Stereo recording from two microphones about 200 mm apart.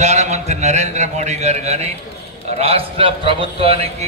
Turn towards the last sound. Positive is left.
turn(degrees=-30)  # may be behind; listen again after turning